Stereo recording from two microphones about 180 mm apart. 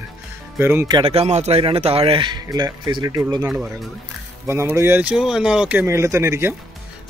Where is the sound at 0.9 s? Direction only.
35° right (ahead or behind).